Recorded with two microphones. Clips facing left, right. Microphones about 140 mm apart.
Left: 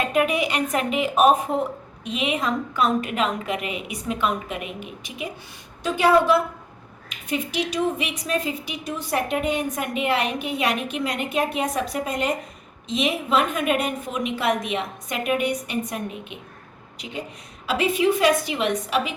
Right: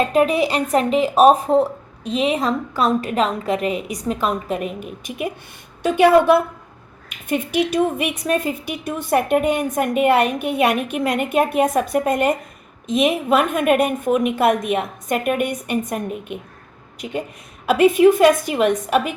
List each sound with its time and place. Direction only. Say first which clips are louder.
0.1 s a woman's voice: right 5 dB; 35° right (ahead or behind); by 19.1 s 50° right (ahead or behind)